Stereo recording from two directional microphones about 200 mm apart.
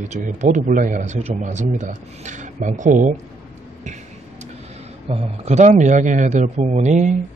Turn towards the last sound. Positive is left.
turn(degrees=-35)  # may be behind; listen again after turning